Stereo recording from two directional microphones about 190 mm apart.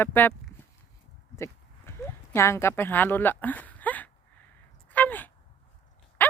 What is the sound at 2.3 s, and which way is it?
Speech, 15° left (ahead or behind).